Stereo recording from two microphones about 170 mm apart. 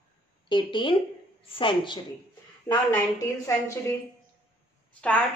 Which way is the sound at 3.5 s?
20° left (ahead or behind).